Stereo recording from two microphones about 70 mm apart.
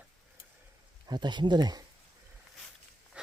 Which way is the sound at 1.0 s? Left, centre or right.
Right.